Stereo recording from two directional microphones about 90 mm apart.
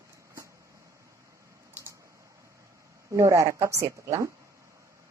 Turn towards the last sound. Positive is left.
turn(degrees=-35)  # may be behind; listen again after turning